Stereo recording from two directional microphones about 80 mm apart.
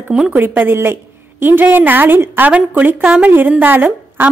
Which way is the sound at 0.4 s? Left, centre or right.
Right.